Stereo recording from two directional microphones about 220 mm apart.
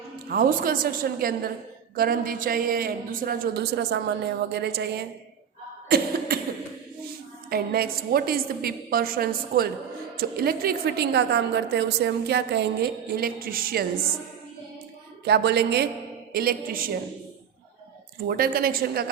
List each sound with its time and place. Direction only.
0.3 s a man's voice: 40° right (ahead or behind)
5.9 s beatboxing: 45° right (ahead or behind)
7.5 s a woman's voice: 45° right (ahead or behind)
15.2 s a woman's voice: 50° right (ahead or behind)
18.3 s a woman's voice: 40° right (ahead or behind)